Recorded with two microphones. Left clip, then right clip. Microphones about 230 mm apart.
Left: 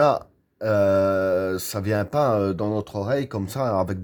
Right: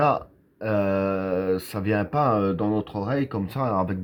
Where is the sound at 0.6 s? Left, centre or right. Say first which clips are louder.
Left 5 dB; left.